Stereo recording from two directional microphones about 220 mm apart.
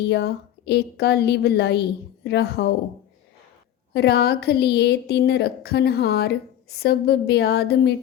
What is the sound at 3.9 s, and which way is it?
A woman's voice, 45° left (ahead or behind).